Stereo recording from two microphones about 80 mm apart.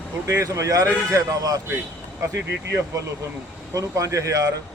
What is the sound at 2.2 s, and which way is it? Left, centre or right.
A man's voice, right.